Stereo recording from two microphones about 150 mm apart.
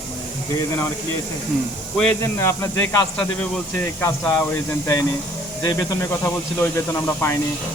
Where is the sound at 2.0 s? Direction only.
15° left (ahead or behind).